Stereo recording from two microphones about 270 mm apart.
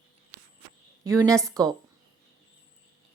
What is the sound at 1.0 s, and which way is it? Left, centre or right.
Speech, centre.